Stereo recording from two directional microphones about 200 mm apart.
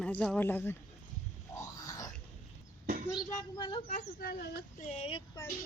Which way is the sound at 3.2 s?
20° left (ahead or behind).